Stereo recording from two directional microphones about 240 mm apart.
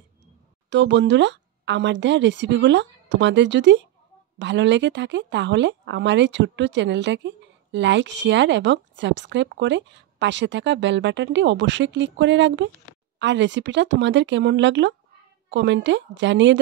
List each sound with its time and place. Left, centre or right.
0.7 s speech: right